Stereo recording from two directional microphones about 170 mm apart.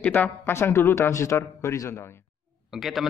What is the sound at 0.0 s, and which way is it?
Speech, 10° left (ahead or behind).